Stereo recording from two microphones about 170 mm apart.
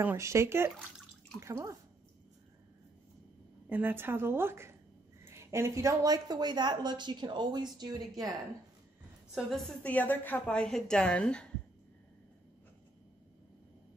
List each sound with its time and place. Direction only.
0.0 s a woman's voice: 15° right (ahead or behind)
3.6 s a woman's voice: 10° right (ahead or behind)
9.3 s a woman's voice: centre (ahead or behind)